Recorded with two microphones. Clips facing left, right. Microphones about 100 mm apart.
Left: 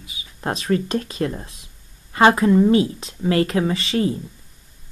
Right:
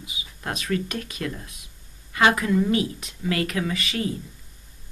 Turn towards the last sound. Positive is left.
turn(degrees=30)  # may be behind; listen again after turning